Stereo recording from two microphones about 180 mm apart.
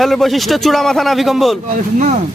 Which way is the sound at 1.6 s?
45° right (ahead or behind).